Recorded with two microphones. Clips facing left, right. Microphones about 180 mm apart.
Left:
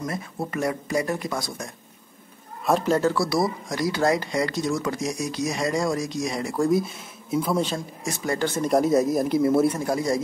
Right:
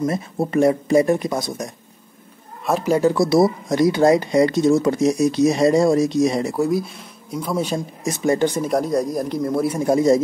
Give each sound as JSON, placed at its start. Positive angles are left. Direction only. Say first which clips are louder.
{"t": 0.0, "sound": "speech", "louder": "right 8 dB", "side_deg": -25}
{"t": 2.6, "sound": "speech", "louder": "right 3 dB", "side_deg": -5}
{"t": 6.5, "sound": "speech", "louder": "right 1 dB", "side_deg": -5}
{"t": 7.6, "sound": "speech", "louder": "right 5 dB", "side_deg": -20}
{"t": 8.6, "sound": "speech", "louder": "even", "side_deg": 0}
{"t": 9.8, "sound": "speech", "louder": "right 8 dB", "side_deg": -25}